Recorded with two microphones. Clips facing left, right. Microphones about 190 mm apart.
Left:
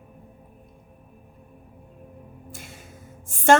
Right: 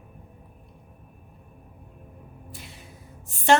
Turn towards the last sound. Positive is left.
turn(degrees=50)  # may be behind; listen again after turning